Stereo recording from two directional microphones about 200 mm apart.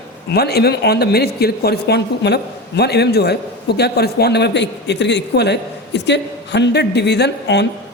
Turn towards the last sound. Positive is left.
turn(degrees=60)  # may be behind; listen again after turning